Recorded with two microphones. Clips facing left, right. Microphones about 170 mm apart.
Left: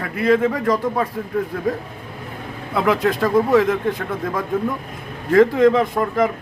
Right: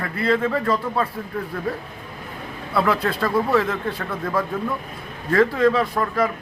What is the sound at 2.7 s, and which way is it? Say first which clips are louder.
Speech: left 3 dB; 15° left (ahead or behind).